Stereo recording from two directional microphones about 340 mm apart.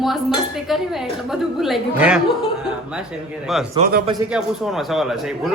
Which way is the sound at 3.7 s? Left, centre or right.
Right.